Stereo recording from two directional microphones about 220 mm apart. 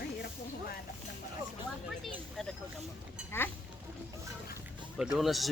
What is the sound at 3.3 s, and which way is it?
Speech, 10° left (ahead or behind).